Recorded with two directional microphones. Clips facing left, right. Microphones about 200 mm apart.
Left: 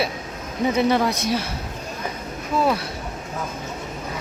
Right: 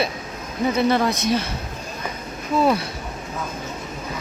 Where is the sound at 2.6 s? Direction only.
Centre (ahead or behind).